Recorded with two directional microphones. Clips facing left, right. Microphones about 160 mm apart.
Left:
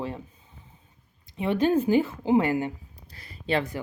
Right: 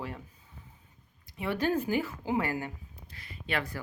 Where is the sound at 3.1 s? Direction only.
40° left (ahead or behind).